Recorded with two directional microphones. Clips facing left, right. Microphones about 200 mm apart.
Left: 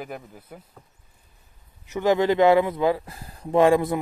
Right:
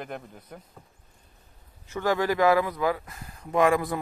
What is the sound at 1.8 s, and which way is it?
Speech, 20° left (ahead or behind).